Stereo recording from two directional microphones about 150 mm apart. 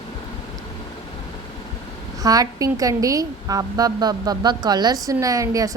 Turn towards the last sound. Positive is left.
turn(degrees=-20)  # may be behind; listen again after turning